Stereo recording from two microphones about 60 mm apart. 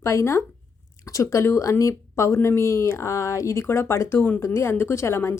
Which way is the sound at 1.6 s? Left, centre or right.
Left.